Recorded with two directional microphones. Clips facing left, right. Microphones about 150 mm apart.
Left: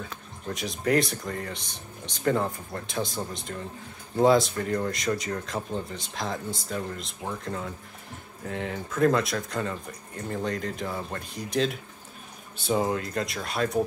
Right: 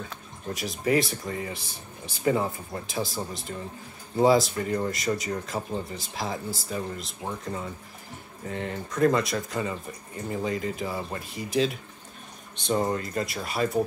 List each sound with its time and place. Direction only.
0.5 s speech: centre (ahead or behind)